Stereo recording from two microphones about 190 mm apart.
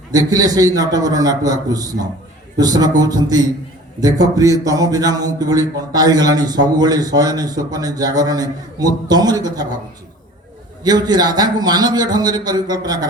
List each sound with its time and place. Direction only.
0.1 s speech: 20° right (ahead or behind)
10.8 s speech: 20° right (ahead or behind)